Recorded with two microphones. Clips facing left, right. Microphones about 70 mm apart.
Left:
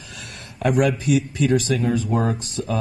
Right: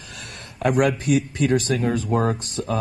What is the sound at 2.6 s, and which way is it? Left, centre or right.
Speech, right.